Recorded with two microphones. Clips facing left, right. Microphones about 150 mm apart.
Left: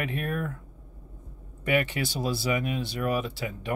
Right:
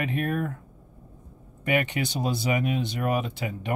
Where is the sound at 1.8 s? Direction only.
20° right (ahead or behind).